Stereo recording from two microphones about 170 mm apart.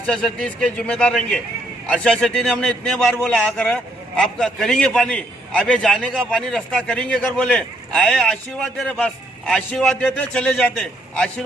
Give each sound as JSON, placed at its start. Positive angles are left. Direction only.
{"t": 0.1, "sound": "a man's voice", "side_deg": 5}